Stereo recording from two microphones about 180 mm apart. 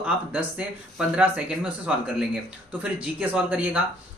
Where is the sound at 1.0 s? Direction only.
5° right (ahead or behind).